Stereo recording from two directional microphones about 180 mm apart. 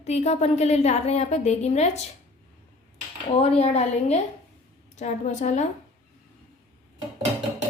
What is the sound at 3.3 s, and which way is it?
A woman's voice, 35° left (ahead or behind).